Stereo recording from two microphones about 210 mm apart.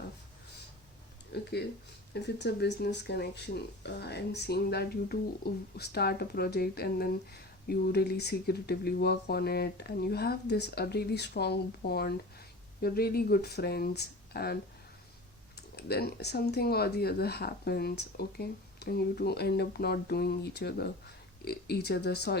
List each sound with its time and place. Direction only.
1.3 s speech: 55° left (ahead or behind)
15.7 s speech: 50° left (ahead or behind)